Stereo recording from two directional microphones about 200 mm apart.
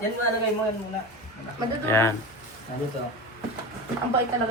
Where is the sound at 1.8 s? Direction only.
10° left (ahead or behind).